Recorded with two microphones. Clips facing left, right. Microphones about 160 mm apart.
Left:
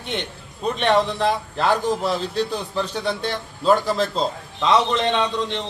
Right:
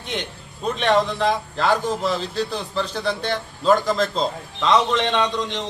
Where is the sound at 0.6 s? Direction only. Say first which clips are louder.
Even; centre (ahead or behind).